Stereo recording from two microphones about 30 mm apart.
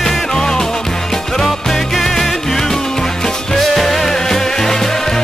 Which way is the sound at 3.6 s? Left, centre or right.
Centre.